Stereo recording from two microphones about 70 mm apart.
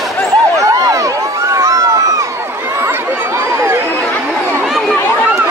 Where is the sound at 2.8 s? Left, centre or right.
Right.